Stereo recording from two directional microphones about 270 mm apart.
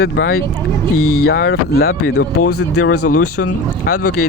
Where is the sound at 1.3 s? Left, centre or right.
Left.